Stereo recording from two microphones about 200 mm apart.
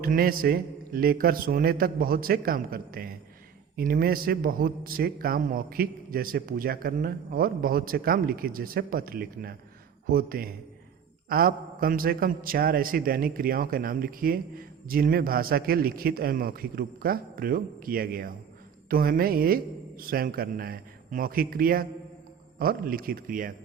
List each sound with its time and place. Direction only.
0.0 s a man's voice: 45° right (ahead or behind)